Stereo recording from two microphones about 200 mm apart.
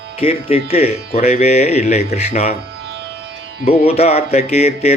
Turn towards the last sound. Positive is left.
turn(degrees=30)  # may be behind; listen again after turning